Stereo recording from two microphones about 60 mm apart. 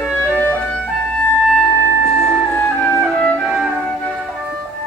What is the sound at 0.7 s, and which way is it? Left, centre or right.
Clarinet, centre.